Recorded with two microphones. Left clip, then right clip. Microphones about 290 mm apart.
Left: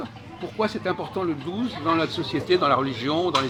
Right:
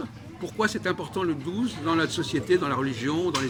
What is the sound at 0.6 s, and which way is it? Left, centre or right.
Speech, centre.